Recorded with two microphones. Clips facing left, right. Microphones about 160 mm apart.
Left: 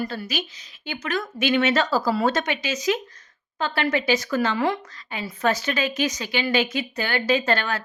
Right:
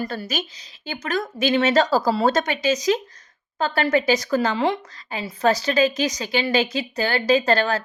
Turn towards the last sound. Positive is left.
turn(degrees=-35)  # may be behind; listen again after turning